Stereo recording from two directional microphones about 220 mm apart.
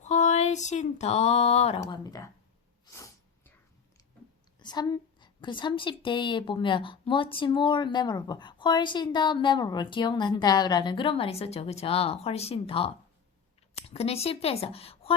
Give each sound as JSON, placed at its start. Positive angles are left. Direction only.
{"t": 0.0, "sound": "speech", "side_deg": 30}
{"t": 2.8, "sound": "sneeze", "side_deg": 15}
{"t": 4.6, "sound": "a woman's voice", "side_deg": 20}